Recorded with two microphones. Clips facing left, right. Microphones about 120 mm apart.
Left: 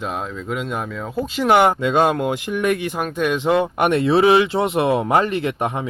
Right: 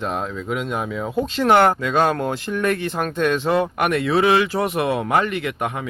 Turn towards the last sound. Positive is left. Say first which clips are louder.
# left 3 dB
turn(degrees=30)  # may be behind; listen again after turning